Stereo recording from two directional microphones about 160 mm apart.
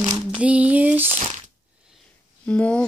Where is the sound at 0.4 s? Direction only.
10° right (ahead or behind).